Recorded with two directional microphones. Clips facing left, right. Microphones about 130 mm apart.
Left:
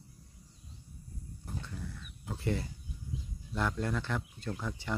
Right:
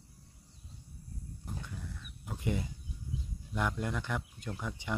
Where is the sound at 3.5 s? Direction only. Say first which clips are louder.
Left 1 dB; 15° right (ahead or behind).